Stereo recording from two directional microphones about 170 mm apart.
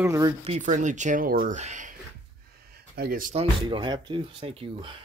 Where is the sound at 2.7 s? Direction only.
60° right (ahead or behind).